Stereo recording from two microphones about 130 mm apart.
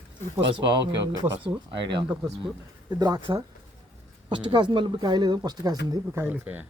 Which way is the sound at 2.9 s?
30° right (ahead or behind).